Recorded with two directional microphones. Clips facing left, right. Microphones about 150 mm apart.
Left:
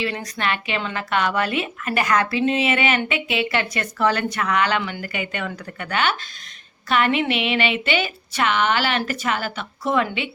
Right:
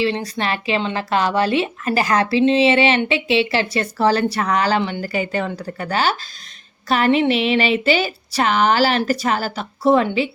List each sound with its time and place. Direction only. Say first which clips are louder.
0.0 s speech: right 5 dB; 30° right (ahead or behind)